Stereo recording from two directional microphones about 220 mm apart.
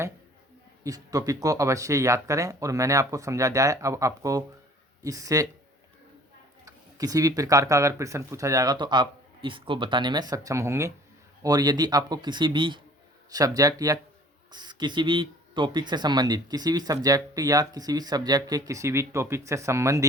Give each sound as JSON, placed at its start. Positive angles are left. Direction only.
{"t": 0.9, "sound": "speech", "side_deg": -15}
{"t": 6.7, "sound": "speech", "side_deg": -15}